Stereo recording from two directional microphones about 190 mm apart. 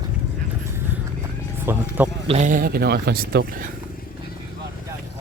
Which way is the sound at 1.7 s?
15° right (ahead or behind).